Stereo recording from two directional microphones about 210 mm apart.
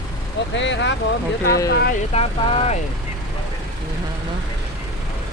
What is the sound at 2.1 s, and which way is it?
Speech, 30° left (ahead or behind).